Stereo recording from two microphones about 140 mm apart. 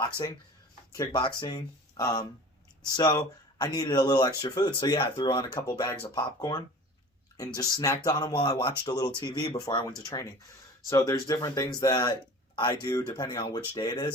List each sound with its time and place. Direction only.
0.9 s speech: 30° left (ahead or behind)